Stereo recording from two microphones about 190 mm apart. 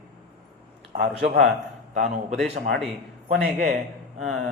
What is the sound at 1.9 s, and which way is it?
Speech, 40° right (ahead or behind).